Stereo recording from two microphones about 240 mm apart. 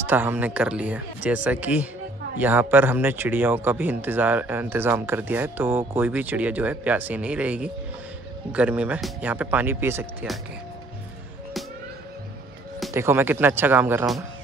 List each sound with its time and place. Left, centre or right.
0.0 s speech: centre
12.9 s speech: centre